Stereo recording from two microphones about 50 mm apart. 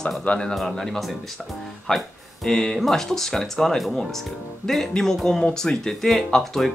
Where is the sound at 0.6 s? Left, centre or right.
Centre.